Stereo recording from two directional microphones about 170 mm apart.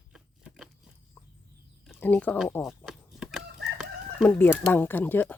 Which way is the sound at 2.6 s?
Centre (ahead or behind).